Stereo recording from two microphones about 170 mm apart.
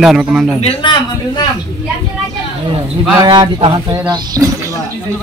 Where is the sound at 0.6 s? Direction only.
30° left (ahead or behind).